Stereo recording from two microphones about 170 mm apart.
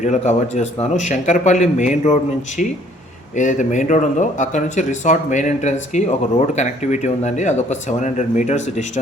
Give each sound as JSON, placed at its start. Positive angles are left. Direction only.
{"t": 0.0, "sound": "speech", "side_deg": 45}